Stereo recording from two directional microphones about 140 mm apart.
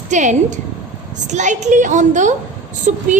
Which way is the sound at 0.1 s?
60° right (ahead or behind).